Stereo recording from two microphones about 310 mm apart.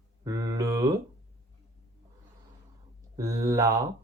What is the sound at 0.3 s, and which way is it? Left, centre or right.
Mantra, centre.